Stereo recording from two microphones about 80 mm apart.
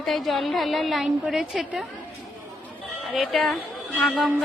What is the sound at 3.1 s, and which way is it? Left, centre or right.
A woman's voice, centre.